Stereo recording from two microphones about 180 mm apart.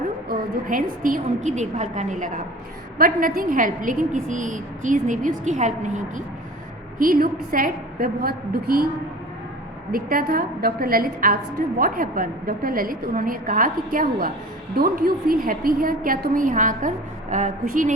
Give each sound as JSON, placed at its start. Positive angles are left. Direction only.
{"t": 0.3, "sound": "a woman's voice", "side_deg": -50}
{"t": 9.9, "sound": "a woman's voice", "side_deg": -55}